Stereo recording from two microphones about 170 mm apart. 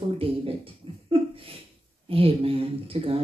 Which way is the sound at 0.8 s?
35° right (ahead or behind).